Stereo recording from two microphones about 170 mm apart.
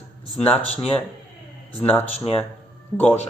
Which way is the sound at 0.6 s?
35° left (ahead or behind).